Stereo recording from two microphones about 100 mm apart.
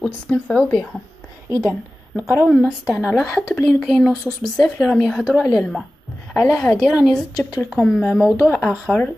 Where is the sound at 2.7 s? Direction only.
5° left (ahead or behind).